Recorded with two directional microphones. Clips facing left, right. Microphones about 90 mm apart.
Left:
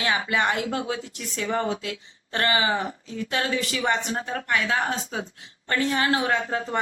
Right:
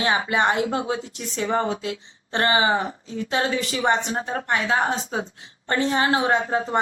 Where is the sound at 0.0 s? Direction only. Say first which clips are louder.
Right 3 dB; 30° right (ahead or behind).